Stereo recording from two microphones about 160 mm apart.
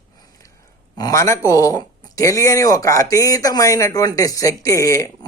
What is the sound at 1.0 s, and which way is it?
Speech, 20° left (ahead or behind).